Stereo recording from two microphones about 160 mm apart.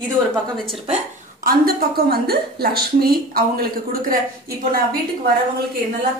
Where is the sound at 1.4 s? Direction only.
70° right (ahead or behind).